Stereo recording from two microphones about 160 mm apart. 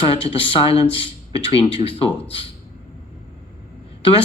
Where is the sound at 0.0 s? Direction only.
35° left (ahead or behind).